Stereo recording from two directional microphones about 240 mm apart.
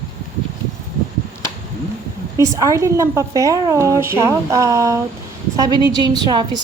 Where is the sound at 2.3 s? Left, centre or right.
Centre.